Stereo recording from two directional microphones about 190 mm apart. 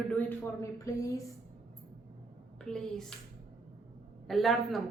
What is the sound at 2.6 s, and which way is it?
Speech, 5° left (ahead or behind).